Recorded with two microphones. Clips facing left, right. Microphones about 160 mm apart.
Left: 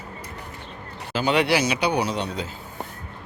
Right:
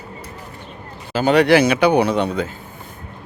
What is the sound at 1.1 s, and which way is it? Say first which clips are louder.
Speech: right 7 dB; 45° right (ahead or behind).